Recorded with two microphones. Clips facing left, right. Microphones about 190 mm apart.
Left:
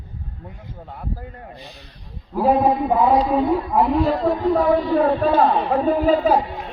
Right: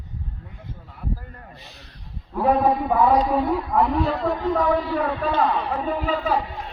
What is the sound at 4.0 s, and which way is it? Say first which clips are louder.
A man's voice: left 4 dB; 35° left (ahead or behind).